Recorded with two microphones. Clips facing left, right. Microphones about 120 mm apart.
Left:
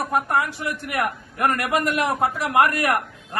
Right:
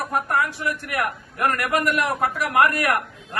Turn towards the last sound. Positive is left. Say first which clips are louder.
# even
turn(degrees=20)  # may be behind; listen again after turning